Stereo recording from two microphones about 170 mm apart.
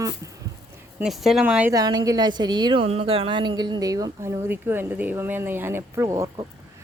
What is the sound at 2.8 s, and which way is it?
Speech, 35° right (ahead or behind).